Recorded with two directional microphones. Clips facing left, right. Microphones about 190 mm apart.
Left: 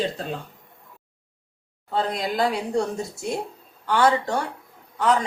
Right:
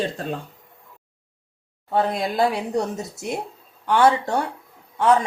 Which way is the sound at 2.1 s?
25° right (ahead or behind).